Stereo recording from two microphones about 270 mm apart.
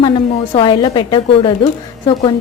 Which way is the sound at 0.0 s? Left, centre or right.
Centre.